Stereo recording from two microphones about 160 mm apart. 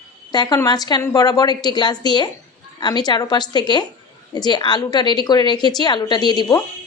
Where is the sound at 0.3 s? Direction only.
25° left (ahead or behind).